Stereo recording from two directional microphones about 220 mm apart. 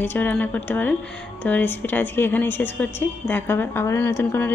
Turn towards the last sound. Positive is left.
turn(degrees=10)  # may be behind; listen again after turning